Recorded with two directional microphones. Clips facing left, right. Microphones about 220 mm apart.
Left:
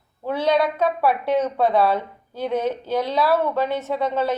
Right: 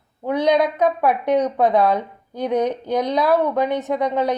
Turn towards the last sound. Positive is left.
turn(degrees=-15)  # may be behind; listen again after turning